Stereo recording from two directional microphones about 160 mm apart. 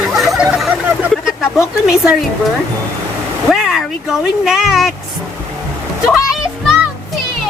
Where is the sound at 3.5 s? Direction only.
Centre (ahead or behind).